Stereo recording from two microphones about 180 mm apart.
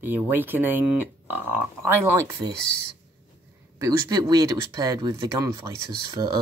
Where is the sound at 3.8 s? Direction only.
20° right (ahead or behind).